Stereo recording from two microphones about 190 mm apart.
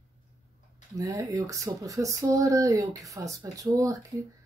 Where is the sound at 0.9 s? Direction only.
15° right (ahead or behind).